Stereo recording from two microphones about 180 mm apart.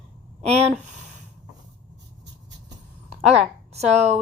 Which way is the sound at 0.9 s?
40° right (ahead or behind).